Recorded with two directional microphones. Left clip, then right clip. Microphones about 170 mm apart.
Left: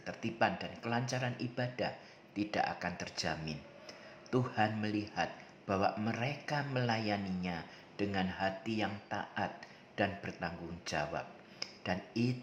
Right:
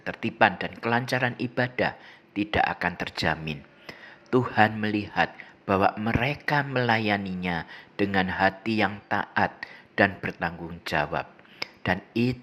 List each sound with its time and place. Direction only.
0.0 s speech: 25° right (ahead or behind)